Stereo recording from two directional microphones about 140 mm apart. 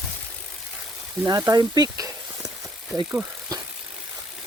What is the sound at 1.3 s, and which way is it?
Speech, 25° right (ahead or behind).